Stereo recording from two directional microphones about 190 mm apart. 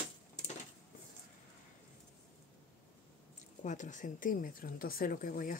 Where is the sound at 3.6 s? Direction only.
40° left (ahead or behind).